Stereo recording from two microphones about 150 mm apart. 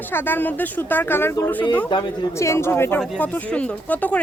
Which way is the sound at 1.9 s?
30° left (ahead or behind).